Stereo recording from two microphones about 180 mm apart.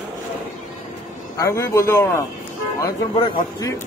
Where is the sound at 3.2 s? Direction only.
30° left (ahead or behind).